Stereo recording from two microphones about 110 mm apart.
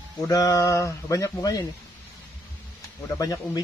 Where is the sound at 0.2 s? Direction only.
35° left (ahead or behind).